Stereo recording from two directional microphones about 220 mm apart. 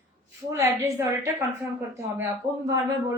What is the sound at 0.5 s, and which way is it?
Speech, 10° right (ahead or behind).